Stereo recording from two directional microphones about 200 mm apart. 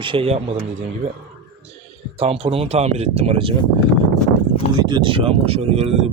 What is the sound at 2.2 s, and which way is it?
Speech, 30° right (ahead or behind).